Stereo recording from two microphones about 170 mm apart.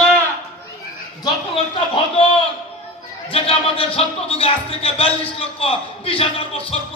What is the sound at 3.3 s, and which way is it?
Speech, 35° left (ahead or behind).